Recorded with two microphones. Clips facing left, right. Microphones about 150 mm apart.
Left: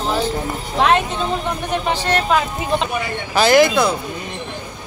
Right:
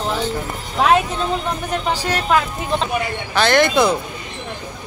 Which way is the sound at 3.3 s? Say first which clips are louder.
Left 3 dB; 5° left (ahead or behind).